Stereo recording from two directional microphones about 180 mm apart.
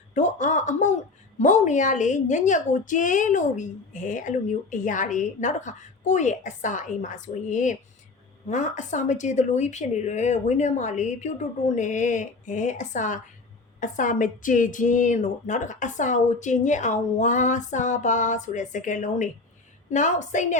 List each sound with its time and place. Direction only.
0.1 s a woman's voice: 40° left (ahead or behind)